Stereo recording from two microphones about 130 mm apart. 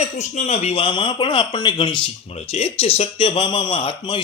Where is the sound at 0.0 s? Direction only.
60° left (ahead or behind).